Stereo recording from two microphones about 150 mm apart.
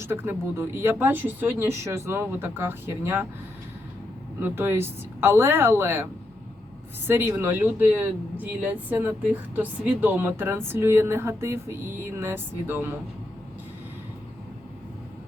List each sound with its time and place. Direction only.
0.0 s speech: 15° right (ahead or behind)
4.4 s speech: 15° right (ahead or behind)
7.1 s speech: 15° right (ahead or behind)